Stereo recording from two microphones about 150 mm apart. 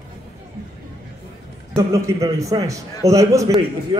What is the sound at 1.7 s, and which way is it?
A man's voice, 20° right (ahead or behind).